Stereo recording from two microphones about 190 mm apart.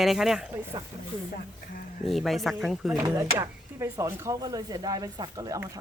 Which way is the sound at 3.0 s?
15° right (ahead or behind).